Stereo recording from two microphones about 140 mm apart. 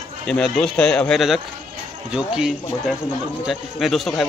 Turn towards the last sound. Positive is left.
turn(degrees=0)  # may be behind; listen again after turning